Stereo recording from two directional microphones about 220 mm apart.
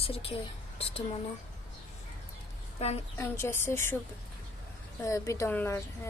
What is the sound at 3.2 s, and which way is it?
Speech, 10° left (ahead or behind).